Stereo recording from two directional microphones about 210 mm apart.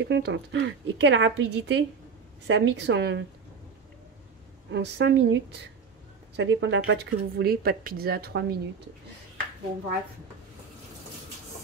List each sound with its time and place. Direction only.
0.0 s a woman's voice: 60° right (ahead or behind)
4.6 s a woman's voice: 55° right (ahead or behind)